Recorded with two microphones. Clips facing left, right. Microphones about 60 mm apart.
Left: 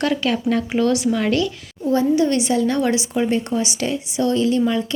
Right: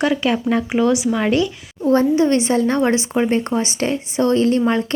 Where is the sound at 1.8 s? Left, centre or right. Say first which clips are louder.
Right 2 dB; right.